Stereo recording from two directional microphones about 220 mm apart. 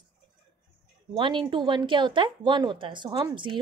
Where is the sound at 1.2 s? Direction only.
20° right (ahead or behind).